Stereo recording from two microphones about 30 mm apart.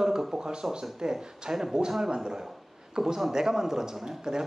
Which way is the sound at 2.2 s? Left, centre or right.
Centre.